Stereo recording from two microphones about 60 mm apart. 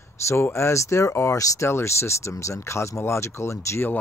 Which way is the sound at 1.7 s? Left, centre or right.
Left.